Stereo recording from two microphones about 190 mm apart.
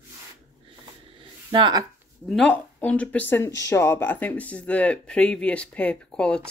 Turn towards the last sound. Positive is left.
turn(degrees=5)  # may be behind; listen again after turning